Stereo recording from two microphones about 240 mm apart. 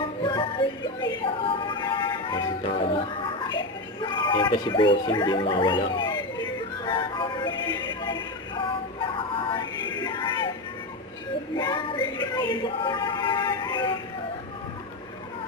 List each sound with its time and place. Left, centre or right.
0.0 s music: left
4.0 s a sound: centre
11.5 s music: centre